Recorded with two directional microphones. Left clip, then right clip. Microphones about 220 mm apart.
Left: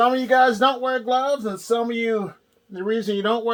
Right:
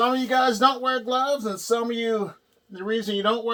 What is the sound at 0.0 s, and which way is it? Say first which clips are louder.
Speech: left 4 dB; 15° left (ahead or behind).